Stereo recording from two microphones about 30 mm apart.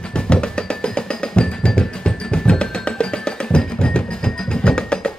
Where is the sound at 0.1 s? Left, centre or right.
Left.